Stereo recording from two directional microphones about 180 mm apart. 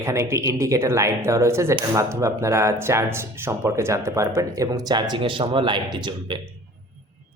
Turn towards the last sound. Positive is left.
turn(degrees=-25)  # may be behind; listen again after turning